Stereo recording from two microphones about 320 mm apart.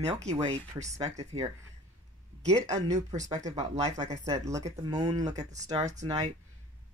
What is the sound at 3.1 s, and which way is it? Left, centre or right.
Speech, centre.